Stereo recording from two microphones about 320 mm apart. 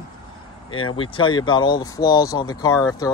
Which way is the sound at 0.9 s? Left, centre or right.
Centre.